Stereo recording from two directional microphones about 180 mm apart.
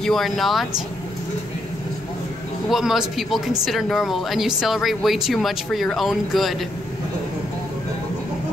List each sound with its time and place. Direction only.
0.0 s speech: centre (ahead or behind)
2.7 s speech: centre (ahead or behind)